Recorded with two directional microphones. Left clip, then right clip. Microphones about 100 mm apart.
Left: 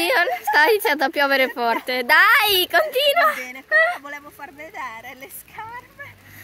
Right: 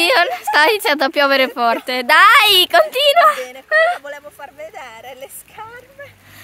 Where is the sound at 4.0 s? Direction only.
35° right (ahead or behind).